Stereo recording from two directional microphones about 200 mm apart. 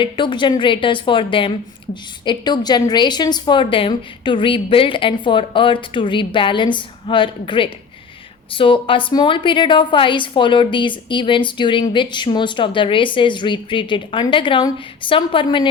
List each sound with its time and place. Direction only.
0.0 s a woman's voice: 25° left (ahead or behind)